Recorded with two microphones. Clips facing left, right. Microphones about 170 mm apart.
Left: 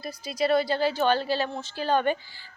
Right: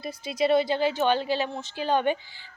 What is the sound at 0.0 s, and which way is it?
A woman's voice, 25° right (ahead or behind).